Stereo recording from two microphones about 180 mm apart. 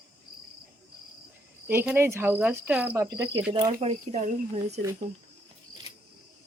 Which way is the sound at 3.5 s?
30° right (ahead or behind).